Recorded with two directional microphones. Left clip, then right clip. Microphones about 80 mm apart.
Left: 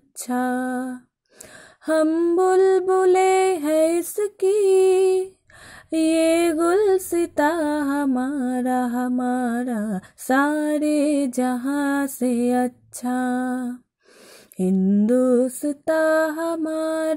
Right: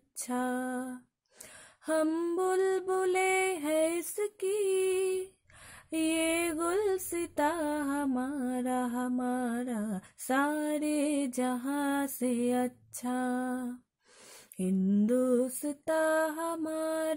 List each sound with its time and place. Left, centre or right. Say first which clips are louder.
0.2 s female singing: left 9 dB; left
2.0 s mantra: left 12 dB; left
3.2 s female singing: left 11 dB; left
14.8 s mantra: left 8 dB; left
15.0 s mantra: left 10 dB; left
15.9 s female singing: left 9 dB; left